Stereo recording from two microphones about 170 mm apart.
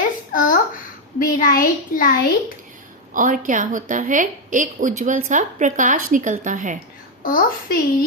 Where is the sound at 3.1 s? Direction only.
50° right (ahead or behind).